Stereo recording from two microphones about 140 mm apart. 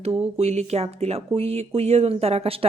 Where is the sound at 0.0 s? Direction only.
45° right (ahead or behind).